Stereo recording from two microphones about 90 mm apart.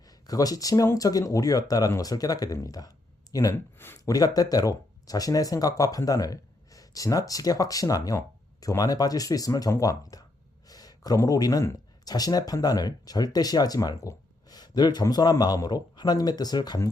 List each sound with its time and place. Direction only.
0.1 s speech: 45° left (ahead or behind)
3.8 s a sound: 25° left (ahead or behind)
4.0 s speech: 45° left (ahead or behind)